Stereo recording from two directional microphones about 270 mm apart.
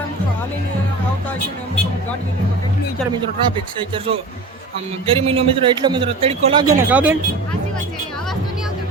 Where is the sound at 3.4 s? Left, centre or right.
Centre.